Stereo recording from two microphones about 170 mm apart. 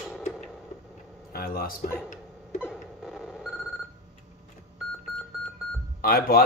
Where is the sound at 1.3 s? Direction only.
60° left (ahead or behind).